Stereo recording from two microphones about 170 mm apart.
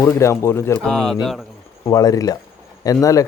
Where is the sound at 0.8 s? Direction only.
Centre (ahead or behind).